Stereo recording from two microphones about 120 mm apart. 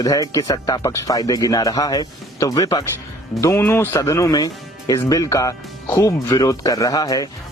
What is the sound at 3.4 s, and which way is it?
Speech, 20° left (ahead or behind).